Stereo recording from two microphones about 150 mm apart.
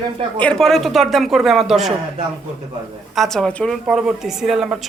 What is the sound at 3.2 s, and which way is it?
A man's voice, 5° left (ahead or behind).